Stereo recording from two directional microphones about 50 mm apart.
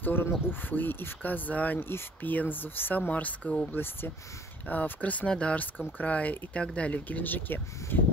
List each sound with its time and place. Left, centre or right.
0.0 s speech: left
1.8 s speech: left
3.0 s speech: left
3.7 s speech: left
4.6 s speech: left